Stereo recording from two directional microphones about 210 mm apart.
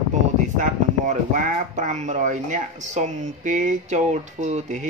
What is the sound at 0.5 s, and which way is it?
Speech, 35° right (ahead or behind).